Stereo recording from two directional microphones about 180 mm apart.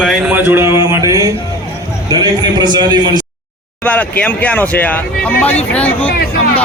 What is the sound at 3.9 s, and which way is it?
Speech, 10° left (ahead or behind).